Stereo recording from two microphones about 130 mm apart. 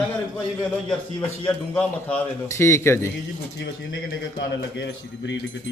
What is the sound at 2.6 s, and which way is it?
Speech, 20° left (ahead or behind).